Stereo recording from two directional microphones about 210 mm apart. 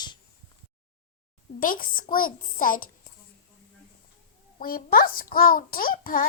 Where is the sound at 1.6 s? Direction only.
40° left (ahead or behind).